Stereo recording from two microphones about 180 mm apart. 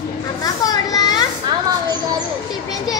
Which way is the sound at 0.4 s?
20° left (ahead or behind).